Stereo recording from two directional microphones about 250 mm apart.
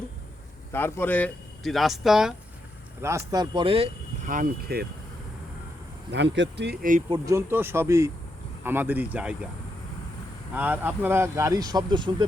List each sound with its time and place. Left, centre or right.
0.7 s speech: centre; by 3.8 s right
4.3 s speech: right
6.1 s speech: right
7.1 s speech: centre
10.5 s speech: centre